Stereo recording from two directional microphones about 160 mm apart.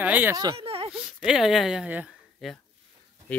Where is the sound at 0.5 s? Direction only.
35° right (ahead or behind).